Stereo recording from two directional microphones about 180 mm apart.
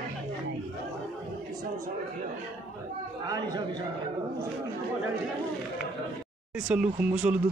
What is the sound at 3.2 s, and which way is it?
Speech, 20° right (ahead or behind).